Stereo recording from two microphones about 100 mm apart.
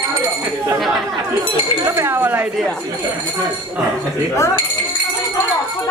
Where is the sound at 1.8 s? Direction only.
30° right (ahead or behind).